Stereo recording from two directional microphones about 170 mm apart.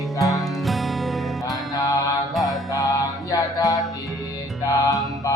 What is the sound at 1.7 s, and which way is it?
Music, 20° left (ahead or behind).